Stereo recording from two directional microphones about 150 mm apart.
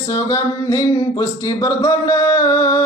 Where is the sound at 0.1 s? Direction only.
20° left (ahead or behind).